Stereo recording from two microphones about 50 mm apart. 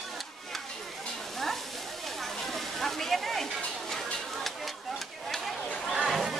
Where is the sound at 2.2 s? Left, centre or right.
Centre.